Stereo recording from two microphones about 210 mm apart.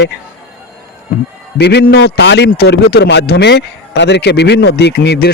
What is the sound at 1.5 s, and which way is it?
A man's voice, 50° left (ahead or behind).